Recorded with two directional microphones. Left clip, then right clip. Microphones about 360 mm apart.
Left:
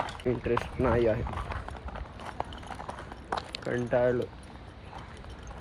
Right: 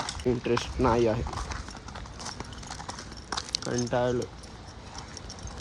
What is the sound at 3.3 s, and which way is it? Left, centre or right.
Keys jangling, centre.